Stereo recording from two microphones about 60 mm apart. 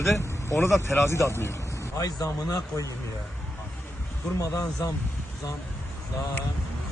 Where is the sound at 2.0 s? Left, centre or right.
Left.